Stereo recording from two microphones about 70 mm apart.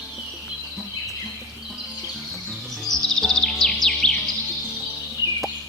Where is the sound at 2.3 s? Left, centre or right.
Centre.